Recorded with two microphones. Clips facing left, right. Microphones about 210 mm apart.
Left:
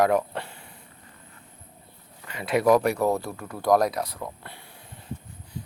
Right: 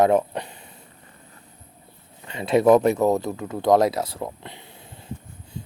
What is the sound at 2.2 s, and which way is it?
Speech, 25° right (ahead or behind).